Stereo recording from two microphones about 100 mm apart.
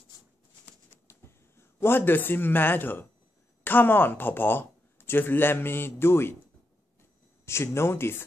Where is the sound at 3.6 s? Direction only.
20° left (ahead or behind).